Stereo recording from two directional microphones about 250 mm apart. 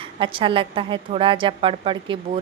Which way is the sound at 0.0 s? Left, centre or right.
Right.